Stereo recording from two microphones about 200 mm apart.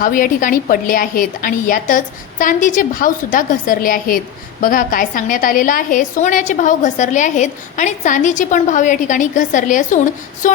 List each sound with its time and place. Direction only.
0.0 s a woman's voice: 45° left (ahead or behind)